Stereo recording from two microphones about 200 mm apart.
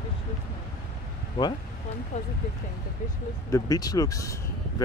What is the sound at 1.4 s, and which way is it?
Speech, 25° left (ahead or behind).